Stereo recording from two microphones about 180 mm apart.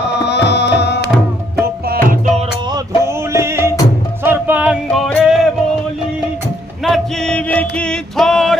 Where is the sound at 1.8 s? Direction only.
50° right (ahead or behind).